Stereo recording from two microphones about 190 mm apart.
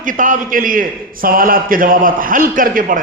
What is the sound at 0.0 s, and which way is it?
A man's voice, 45° right (ahead or behind).